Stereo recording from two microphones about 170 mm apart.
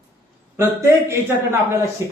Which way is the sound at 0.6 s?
15° right (ahead or behind).